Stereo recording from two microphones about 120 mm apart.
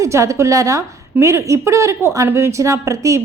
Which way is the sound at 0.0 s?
25° right (ahead or behind).